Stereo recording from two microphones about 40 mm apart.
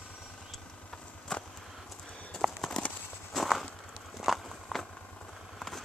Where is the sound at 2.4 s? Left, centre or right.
Centre.